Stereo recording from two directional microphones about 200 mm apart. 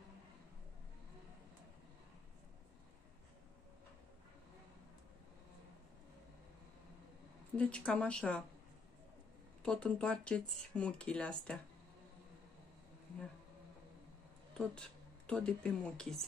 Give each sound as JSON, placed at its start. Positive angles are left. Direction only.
{"t": 7.5, "sound": "speech", "side_deg": 5}
{"t": 9.6, "sound": "speech", "side_deg": 5}
{"t": 14.6, "sound": "speech", "side_deg": 5}